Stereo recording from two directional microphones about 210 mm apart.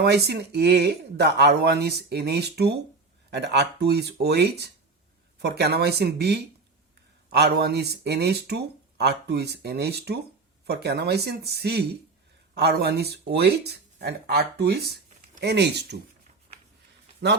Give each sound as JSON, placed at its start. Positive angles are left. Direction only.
{"t": 0.0, "sound": "speech", "side_deg": -50}